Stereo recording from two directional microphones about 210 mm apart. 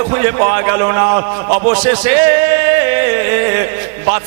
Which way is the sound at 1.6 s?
10° right (ahead or behind).